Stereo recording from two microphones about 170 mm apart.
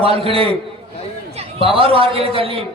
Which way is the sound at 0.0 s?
35° right (ahead or behind).